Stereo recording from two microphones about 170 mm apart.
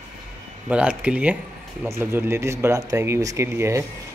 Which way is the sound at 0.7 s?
10° right (ahead or behind).